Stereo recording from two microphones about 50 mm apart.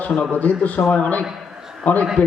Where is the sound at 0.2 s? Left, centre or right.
Left.